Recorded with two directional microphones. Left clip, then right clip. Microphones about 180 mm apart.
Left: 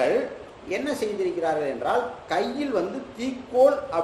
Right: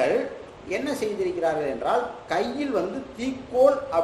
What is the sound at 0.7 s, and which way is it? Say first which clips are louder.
A woman's voice: even; centre (ahead or behind).